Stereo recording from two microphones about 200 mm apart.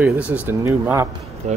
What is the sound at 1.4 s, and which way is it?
Speech, 35° right (ahead or behind).